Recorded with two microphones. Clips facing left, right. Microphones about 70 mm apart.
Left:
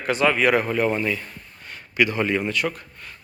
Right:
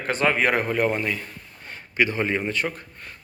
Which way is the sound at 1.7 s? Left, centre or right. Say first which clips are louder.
Left 1 dB; right.